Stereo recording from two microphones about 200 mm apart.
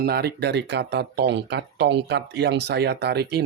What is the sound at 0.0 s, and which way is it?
Speech, 50° right (ahead or behind).